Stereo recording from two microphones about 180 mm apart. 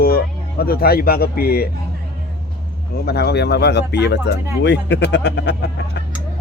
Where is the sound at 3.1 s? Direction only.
65° left (ahead or behind).